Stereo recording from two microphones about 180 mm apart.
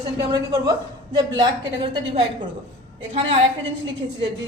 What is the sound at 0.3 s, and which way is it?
A woman's voice, 20° right (ahead or behind).